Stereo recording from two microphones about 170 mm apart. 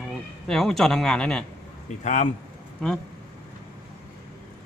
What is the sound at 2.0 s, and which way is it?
Speech, 45° left (ahead or behind).